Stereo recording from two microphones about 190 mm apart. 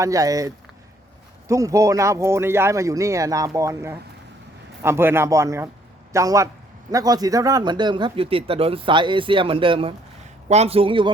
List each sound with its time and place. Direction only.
0.0 s speech: 15° right (ahead or behind)